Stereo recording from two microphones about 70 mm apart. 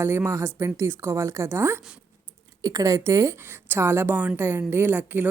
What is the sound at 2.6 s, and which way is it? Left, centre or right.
Speech, right.